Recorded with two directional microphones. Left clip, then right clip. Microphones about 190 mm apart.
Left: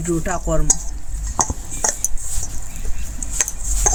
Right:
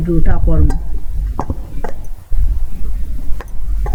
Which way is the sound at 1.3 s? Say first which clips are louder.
Left 3 dB; 40° left (ahead or behind).